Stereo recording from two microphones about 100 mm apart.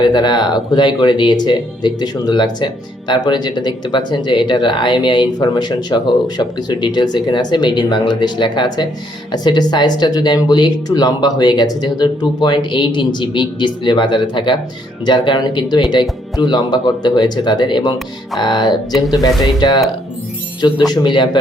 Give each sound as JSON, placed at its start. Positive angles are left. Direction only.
{"t": 0.0, "sound": "speech", "side_deg": 45}